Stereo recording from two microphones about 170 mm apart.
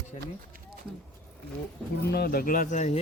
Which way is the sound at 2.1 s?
65° left (ahead or behind).